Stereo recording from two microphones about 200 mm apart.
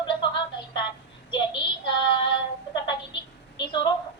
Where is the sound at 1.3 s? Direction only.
25° left (ahead or behind).